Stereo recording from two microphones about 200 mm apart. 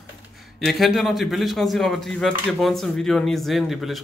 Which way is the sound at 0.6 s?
Centre (ahead or behind).